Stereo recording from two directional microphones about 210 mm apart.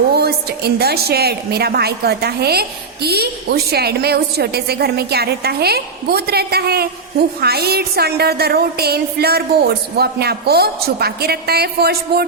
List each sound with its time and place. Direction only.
0.1 s a woman's voice: 50° right (ahead or behind)